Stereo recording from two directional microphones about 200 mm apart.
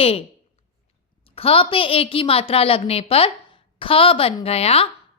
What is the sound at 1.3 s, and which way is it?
A woman's voice, 30° left (ahead or behind).